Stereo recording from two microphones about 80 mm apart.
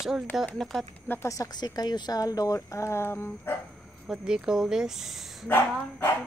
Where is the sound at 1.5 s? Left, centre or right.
Left.